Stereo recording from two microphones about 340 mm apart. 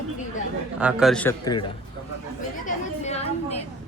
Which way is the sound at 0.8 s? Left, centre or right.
Centre.